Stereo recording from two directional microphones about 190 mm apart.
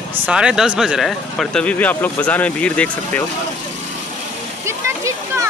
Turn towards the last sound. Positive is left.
turn(degrees=-15)  # may be behind; listen again after turning